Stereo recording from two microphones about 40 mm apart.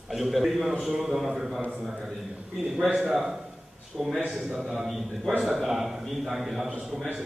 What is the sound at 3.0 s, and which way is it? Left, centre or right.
A man's voice, centre.